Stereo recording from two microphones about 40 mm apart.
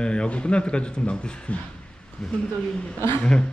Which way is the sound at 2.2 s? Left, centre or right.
Centre.